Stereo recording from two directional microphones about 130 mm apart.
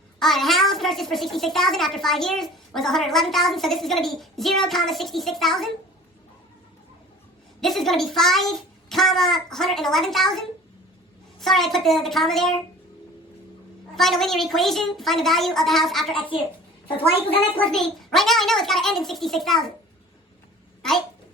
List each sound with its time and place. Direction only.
0.2 s a child's voice: centre (ahead or behind)
7.6 s a child's voice: centre (ahead or behind)
13.9 s a child's voice: centre (ahead or behind)
17.0 s a woman's voice: 45° left (ahead or behind)
17.6 s a child's voice: 5° left (ahead or behind)